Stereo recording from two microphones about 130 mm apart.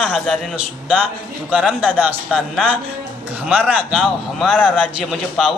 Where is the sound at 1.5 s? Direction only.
10° right (ahead or behind).